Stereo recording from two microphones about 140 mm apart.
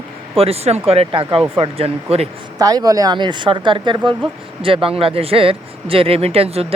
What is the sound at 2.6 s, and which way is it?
Speech, 25° right (ahead or behind).